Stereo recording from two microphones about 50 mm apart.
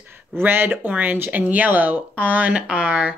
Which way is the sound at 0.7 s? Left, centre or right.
Right.